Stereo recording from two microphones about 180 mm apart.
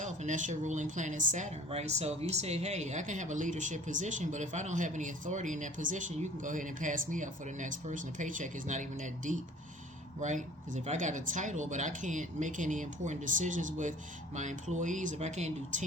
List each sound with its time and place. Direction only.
0.0 s speech: 40° right (ahead or behind)